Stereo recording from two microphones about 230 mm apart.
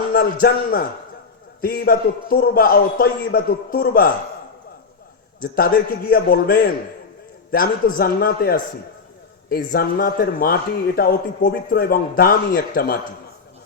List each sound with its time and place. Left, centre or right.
0.1 s a man's voice: left
6.1 s a man's voice: left